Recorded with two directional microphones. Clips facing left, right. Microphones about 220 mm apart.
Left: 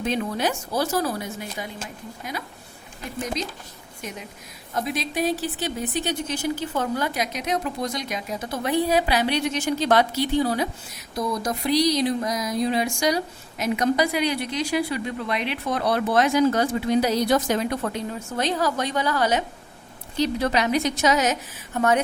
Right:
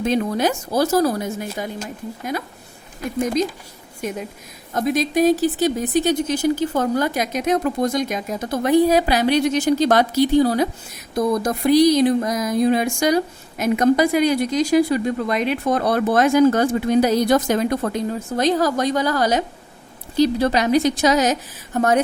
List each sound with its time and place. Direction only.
0.0 s speech: 40° right (ahead or behind)
4.7 s speech: 45° right (ahead or behind)
11.1 s a woman's voice: 50° right (ahead or behind)